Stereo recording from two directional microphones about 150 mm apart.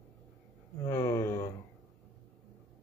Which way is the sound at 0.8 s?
20° left (ahead or behind).